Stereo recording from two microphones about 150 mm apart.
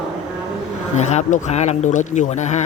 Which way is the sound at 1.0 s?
50° left (ahead or behind).